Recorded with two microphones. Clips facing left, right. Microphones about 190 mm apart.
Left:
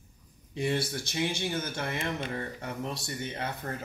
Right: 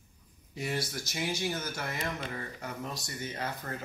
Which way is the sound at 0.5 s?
25° left (ahead or behind).